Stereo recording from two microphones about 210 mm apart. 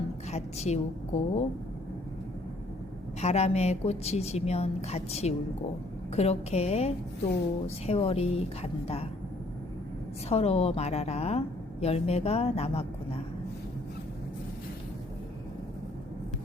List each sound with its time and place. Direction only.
0.3 s a woman's voice: 30° left (ahead or behind)
3.2 s a woman's voice: 30° left (ahead or behind)
10.2 s a woman's voice: 30° left (ahead or behind)